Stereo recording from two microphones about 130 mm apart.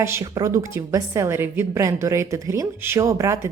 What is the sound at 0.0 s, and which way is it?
A woman's voice, 20° right (ahead or behind).